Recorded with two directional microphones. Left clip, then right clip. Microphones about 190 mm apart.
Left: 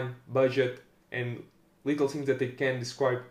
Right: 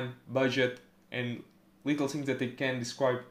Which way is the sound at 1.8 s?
30° right (ahead or behind).